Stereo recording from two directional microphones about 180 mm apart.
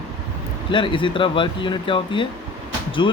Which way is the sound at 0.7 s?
25° left (ahead or behind).